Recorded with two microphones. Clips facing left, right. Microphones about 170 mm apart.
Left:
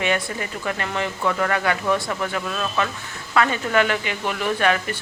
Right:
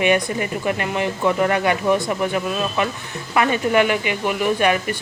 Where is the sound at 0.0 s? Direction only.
15° right (ahead or behind).